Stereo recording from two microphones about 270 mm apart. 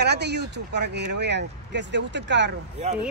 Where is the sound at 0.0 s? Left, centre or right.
Right.